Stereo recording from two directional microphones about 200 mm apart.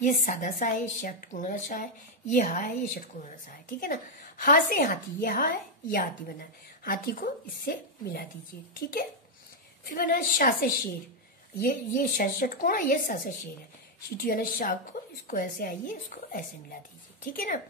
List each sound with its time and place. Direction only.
0.0 s a woman's voice: 40° left (ahead or behind)
9.8 s a woman's voice: 45° left (ahead or behind)